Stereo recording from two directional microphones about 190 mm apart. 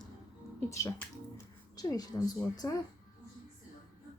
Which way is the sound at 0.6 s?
15° left (ahead or behind).